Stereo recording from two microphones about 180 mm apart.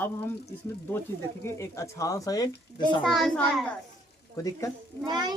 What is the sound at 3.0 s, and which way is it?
Speech, centre (ahead or behind).